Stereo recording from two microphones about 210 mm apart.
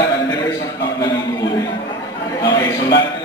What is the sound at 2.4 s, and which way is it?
Speech, 20° left (ahead or behind).